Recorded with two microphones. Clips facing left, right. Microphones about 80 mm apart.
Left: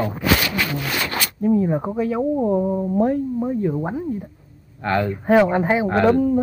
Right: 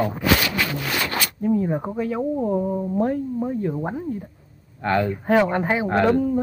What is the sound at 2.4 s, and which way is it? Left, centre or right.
Speech, centre.